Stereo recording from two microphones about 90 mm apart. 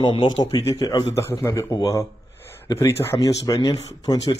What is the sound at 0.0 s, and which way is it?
Speech, 70° left (ahead or behind).